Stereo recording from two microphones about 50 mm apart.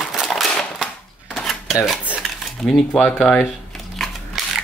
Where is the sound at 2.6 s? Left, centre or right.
Centre.